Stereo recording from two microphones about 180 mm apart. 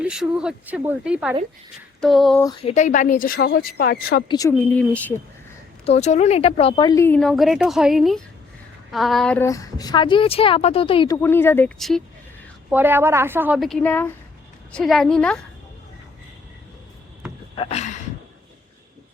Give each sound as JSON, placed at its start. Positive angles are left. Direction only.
{"t": 0.0, "sound": "speech", "side_deg": -5}
{"t": 2.4, "sound": "a woman's voice", "side_deg": 20}
{"t": 2.6, "sound": "a woman's voice", "side_deg": 40}
{"t": 4.3, "sound": "a woman's voice", "side_deg": 20}
{"t": 4.5, "sound": "speech", "side_deg": 10}
{"t": 5.8, "sound": "speech", "side_deg": 40}
{"t": 7.2, "sound": "a woman's voice", "side_deg": 0}
{"t": 11.2, "sound": "speech", "side_deg": 15}
{"t": 11.8, "sound": "speech", "side_deg": 0}
{"t": 12.7, "sound": "a woman's voice", "side_deg": -10}
{"t": 13.6, "sound": "speech", "side_deg": 5}
{"t": 17.6, "sound": "speech", "side_deg": 35}